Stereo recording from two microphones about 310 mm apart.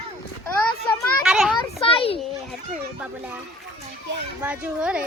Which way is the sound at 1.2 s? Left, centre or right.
Centre.